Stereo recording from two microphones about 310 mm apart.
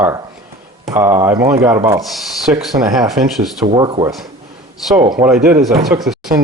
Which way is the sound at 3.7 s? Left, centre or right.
Centre.